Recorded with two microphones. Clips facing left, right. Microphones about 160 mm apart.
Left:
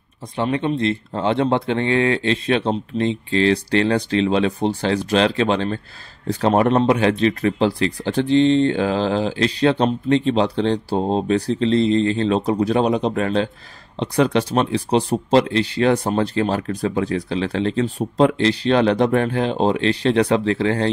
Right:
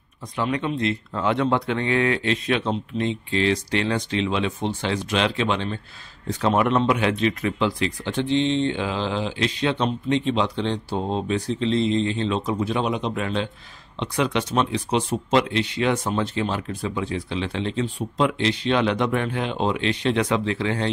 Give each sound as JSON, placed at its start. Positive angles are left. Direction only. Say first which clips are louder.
{"t": 0.4, "sound": "speech", "louder": "left 4 dB", "side_deg": 30}
{"t": 16.6, "sound": "speech", "louder": "left 6 dB", "side_deg": 55}
{"t": 17.0, "sound": "speech", "louder": "left 5 dB", "side_deg": 40}